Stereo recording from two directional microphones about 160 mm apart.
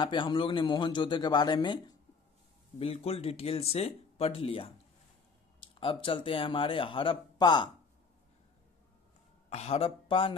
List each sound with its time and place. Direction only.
0.0 s a man's voice: 30° left (ahead or behind)
9.5 s speech: 40° left (ahead or behind)